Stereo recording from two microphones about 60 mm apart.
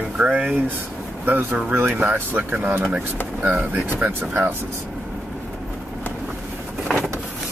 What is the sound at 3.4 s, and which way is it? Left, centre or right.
Speech, centre.